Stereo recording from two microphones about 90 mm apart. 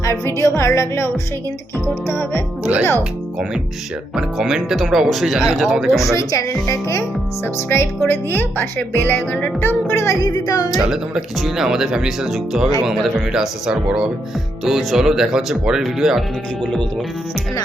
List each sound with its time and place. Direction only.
0.0 s a woman's voice: 35° left (ahead or behind)
2.1 s speech: 25° left (ahead or behind)
2.7 s speech: 25° right (ahead or behind)
4.1 s speech: 5° right (ahead or behind)
6.1 s a woman's voice: 35° left (ahead or behind)
10.2 s music: 45° left (ahead or behind)
10.8 s speech: 5° right (ahead or behind)